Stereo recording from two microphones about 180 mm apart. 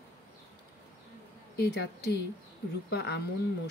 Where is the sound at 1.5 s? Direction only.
65° left (ahead or behind).